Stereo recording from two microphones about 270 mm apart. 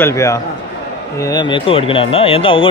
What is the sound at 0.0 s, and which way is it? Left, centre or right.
Speech, centre.